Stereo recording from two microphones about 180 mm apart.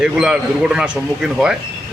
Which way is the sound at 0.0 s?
5° right (ahead or behind).